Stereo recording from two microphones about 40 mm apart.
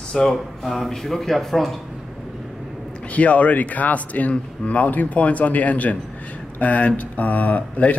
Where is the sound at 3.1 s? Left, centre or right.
Left.